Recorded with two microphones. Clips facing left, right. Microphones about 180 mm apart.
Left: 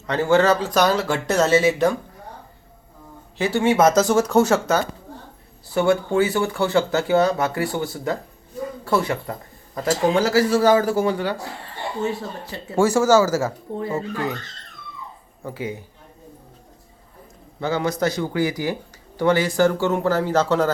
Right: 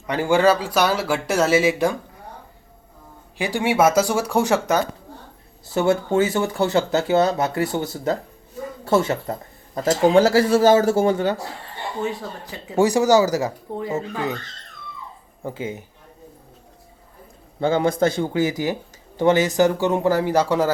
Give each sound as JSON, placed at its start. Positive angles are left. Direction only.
{"t": 0.1, "sound": "speech", "side_deg": -10}
{"t": 3.3, "sound": "speech", "side_deg": -15}
{"t": 8.8, "sound": "speech", "side_deg": -25}
{"t": 15.4, "sound": "speech", "side_deg": -25}
{"t": 17.6, "sound": "speech", "side_deg": -25}